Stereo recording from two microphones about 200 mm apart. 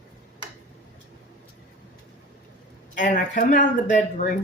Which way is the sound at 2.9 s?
40° left (ahead or behind).